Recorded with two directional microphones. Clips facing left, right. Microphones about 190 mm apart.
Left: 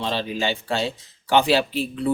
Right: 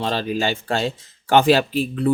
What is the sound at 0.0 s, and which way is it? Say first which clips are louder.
Speech: right 3 dB; 45° right (ahead or behind).